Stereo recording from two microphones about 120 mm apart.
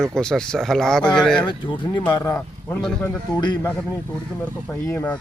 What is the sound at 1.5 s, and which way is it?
Speech, 40° left (ahead or behind).